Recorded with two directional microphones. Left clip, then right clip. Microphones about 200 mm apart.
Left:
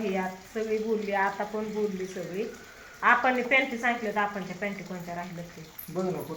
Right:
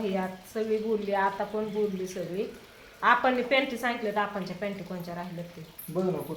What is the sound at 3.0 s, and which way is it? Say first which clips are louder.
A woman's voice: left 1 dB; 5° right (ahead or behind).